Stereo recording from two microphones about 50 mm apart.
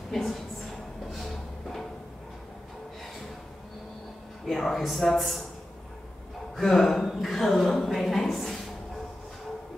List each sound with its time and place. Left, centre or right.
0.1 s a woman's voice: centre
1.1 s music: centre
4.5 s speech: centre
6.5 s speech: centre
7.1 s a sound: centre